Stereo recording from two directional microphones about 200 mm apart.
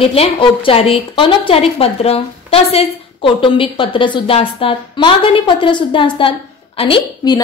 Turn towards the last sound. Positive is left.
turn(degrees=25)  # may be behind; listen again after turning